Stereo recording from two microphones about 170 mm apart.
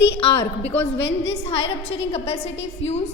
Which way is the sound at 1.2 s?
35° left (ahead or behind).